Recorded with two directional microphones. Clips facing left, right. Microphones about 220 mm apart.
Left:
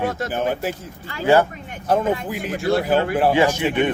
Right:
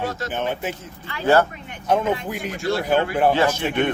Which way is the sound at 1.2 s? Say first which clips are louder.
Left 1 dB; 10° left (ahead or behind).